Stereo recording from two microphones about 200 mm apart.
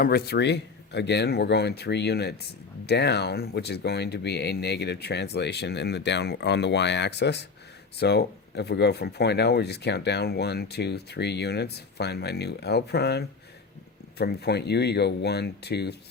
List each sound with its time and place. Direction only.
0.0 s speech: 50° left (ahead or behind)